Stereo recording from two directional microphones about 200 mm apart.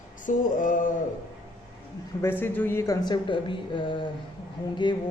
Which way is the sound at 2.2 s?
10° left (ahead or behind).